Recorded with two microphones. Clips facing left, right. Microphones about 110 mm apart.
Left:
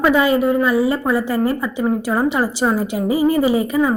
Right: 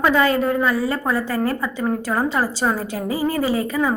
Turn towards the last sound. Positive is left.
turn(degrees=15)  # may be behind; listen again after turning